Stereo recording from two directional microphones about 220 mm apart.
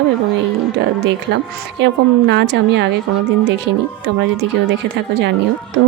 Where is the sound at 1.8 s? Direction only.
50° right (ahead or behind).